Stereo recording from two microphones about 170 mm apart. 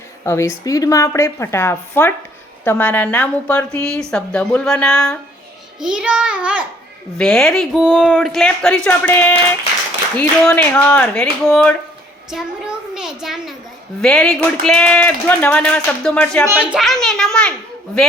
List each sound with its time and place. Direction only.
0.3 s a child's voice: 15° left (ahead or behind)